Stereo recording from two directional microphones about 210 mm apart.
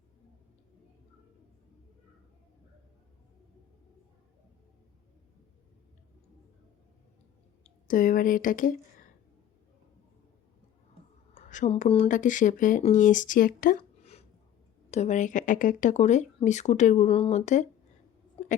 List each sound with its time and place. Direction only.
7.6 s speech: 40° left (ahead or behind)
11.3 s speech: 35° left (ahead or behind)